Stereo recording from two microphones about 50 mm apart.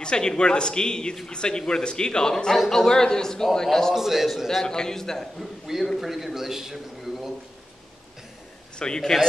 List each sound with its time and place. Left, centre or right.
0.0 s a man's voice: centre
3.9 s a man's voice: centre
5.9 s a man's voice: centre
8.7 s a man's voice: centre